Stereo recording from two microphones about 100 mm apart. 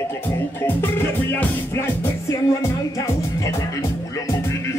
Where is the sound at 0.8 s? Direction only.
20° left (ahead or behind).